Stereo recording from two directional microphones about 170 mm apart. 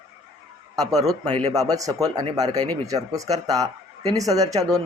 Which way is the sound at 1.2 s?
35° right (ahead or behind).